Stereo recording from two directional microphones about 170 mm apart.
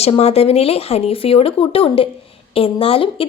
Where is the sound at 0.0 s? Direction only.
40° left (ahead or behind).